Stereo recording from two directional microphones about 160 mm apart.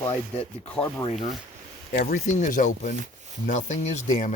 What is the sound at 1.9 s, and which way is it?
Speech, 60° left (ahead or behind).